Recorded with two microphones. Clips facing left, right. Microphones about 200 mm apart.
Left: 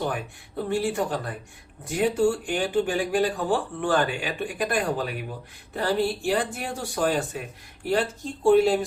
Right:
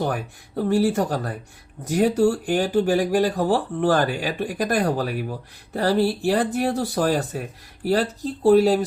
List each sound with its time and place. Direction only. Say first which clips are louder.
0.0 s speech: right 3 dB; 40° right (ahead or behind)